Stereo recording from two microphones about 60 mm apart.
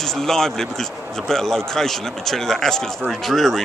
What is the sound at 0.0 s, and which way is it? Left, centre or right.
A man's voice, centre.